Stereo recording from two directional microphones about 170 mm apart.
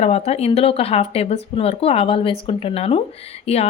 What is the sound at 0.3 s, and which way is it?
A woman's voice, 35° left (ahead or behind).